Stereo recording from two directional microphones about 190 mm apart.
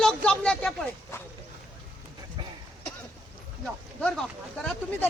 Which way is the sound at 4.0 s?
5° left (ahead or behind).